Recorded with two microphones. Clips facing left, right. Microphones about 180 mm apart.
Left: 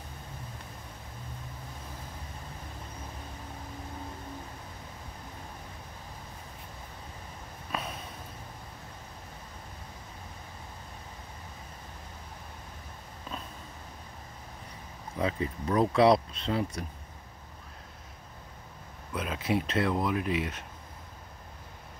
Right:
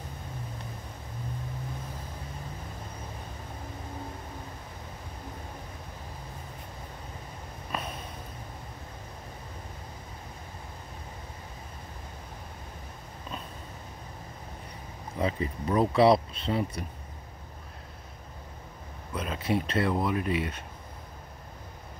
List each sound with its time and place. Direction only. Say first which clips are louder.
7.7 s a sound: right 1 dB; centre (ahead or behind)
15.1 s speech: right 1 dB; centre (ahead or behind)
19.1 s speech: right 1 dB; centre (ahead or behind)